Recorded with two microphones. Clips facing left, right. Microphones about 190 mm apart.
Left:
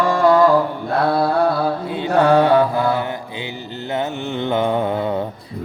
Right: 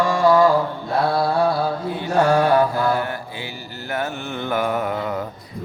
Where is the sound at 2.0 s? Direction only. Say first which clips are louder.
Left 3 dB; 60° left (ahead or behind).